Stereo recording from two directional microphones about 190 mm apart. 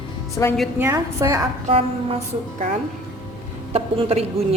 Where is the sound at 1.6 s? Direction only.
30° right (ahead or behind).